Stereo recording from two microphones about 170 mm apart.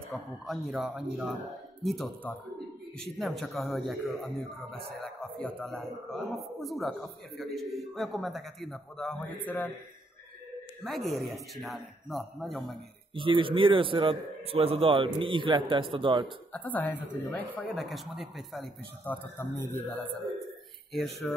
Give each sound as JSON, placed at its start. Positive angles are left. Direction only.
{"t": 0.5, "sound": "a man's voice", "side_deg": -5}
{"t": 10.9, "sound": "a man's voice", "side_deg": 0}
{"t": 13.1, "sound": "a man's voice", "side_deg": -30}
{"t": 16.5, "sound": "a woman's voice", "side_deg": 10}
{"t": 19.0, "sound": "a woman's voice", "side_deg": 15}
{"t": 20.9, "sound": "a man's voice", "side_deg": 0}